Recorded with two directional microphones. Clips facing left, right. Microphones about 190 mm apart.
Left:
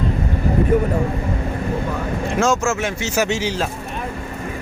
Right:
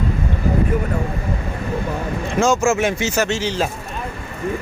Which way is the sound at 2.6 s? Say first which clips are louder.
Right 4 dB; 15° right (ahead or behind).